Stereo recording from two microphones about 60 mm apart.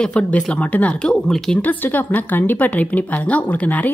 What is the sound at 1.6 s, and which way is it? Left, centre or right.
A woman's voice, left.